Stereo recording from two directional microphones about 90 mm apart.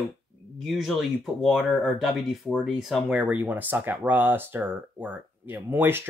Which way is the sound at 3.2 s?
20° right (ahead or behind).